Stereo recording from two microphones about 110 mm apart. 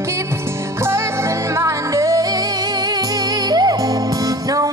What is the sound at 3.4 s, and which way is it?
Music, 35° right (ahead or behind).